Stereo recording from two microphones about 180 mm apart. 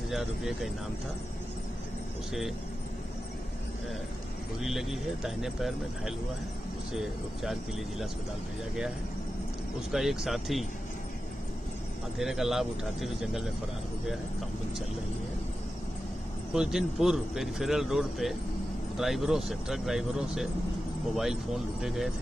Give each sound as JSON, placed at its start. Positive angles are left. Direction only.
{"t": 0.1, "sound": "speech", "side_deg": 0}
{"t": 4.6, "sound": "speech", "side_deg": 0}
{"t": 9.8, "sound": "speech", "side_deg": 0}
{"t": 12.2, "sound": "speech", "side_deg": 0}
{"t": 16.5, "sound": "speech", "side_deg": 0}